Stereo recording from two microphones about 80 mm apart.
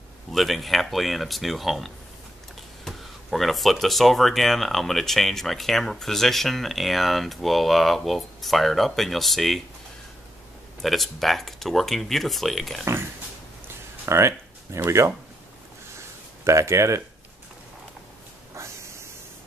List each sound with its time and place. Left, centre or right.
0.3 s speech: centre
10.8 s speech: centre
14.0 s music: right
14.9 s speech: right
16.4 s speech: right
18.5 s a sound: right